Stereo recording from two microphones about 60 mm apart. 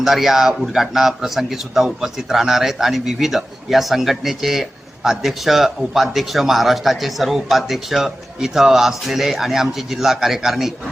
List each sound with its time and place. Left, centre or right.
0.0 s a man's voice: centre